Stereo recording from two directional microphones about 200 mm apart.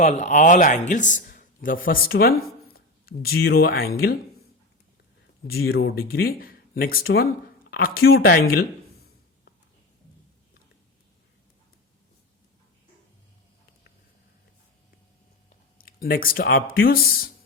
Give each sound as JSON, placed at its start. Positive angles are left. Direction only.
{"t": 0.0, "sound": "a man's voice", "side_deg": 35}
{"t": 5.5, "sound": "speech", "side_deg": 50}
{"t": 15.4, "sound": "speech", "side_deg": 45}